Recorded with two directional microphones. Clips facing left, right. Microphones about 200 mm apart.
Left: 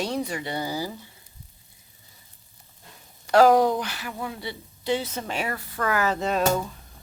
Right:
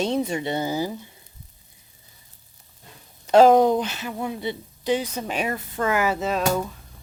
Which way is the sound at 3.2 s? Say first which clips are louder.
Right 3 dB; 20° right (ahead or behind).